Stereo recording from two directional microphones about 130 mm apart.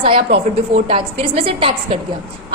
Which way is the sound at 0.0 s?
50° right (ahead or behind).